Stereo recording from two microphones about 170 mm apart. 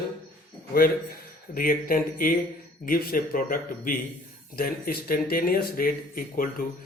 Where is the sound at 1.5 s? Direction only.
55° left (ahead or behind).